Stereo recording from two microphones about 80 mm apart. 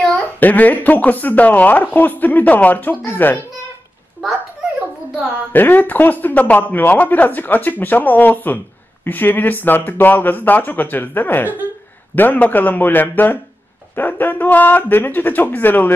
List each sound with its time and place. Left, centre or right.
0.0 s a man's voice: centre
5.5 s a man's voice: left
11.4 s speech: right
12.2 s a man's voice: left